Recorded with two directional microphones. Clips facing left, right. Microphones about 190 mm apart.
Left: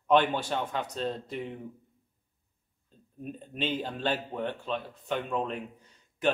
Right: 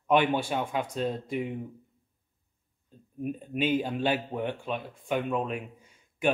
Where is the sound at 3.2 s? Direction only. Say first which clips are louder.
Right 5 dB; 10° right (ahead or behind).